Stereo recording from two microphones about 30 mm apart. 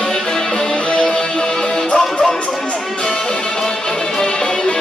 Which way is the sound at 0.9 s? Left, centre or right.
Left.